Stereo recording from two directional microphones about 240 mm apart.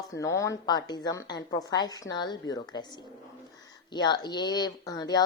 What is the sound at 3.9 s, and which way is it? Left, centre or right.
A woman's voice, centre.